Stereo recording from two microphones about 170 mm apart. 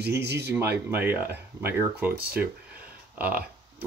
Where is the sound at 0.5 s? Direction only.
15° right (ahead or behind).